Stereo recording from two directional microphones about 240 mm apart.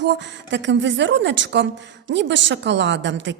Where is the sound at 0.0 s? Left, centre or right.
Right.